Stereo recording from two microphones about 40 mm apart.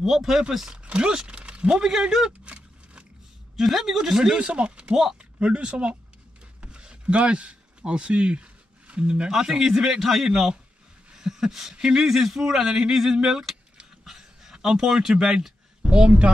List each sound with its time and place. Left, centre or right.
0.0 s speech: centre
0.8 s speech: right
1.7 s speech: centre
2.4 s a sound: right
3.5 s speech: centre; by 5.9 s right
6.6 s a sound: right
9.3 s speech: centre
11.1 s a sound: centre
11.8 s speech: centre
15.8 s a woman's voice: right